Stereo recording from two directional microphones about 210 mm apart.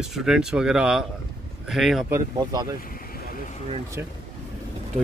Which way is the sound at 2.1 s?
15° right (ahead or behind).